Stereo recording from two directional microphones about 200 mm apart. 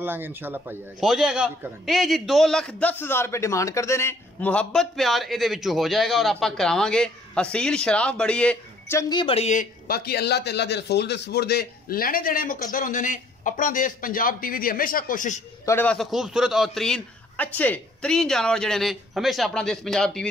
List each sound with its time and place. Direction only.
0.0 s a man's voice: 10° right (ahead or behind); by 9.2 s 10° left (ahead or behind)
9.2 s a man's voice: 30° left (ahead or behind)
15.6 s a man's voice: 10° left (ahead or behind)